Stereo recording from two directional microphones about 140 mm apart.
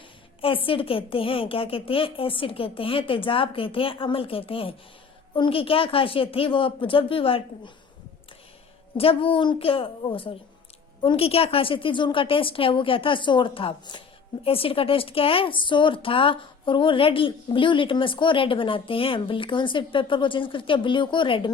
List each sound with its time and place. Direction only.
0.4 s a woman's voice: 40° left (ahead or behind)
9.0 s a woman's voice: 40° left (ahead or behind)